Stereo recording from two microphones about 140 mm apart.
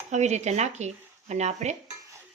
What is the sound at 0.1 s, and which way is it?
Speech, 55° right (ahead or behind).